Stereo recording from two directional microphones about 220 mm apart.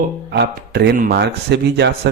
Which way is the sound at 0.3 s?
50° right (ahead or behind).